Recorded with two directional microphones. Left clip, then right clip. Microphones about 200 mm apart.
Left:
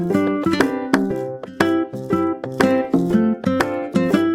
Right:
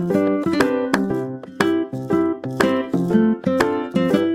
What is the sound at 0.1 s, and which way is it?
Music, centre (ahead or behind).